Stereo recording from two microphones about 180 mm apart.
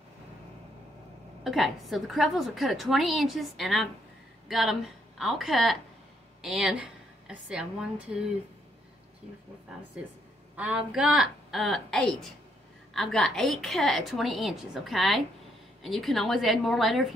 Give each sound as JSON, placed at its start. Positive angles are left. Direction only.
{"t": 1.4, "sound": "a woman's voice", "side_deg": 0}
{"t": 10.5, "sound": "a woman's voice", "side_deg": -5}